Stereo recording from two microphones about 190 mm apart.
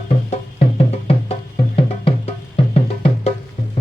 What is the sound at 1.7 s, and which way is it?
Music, 30° left (ahead or behind).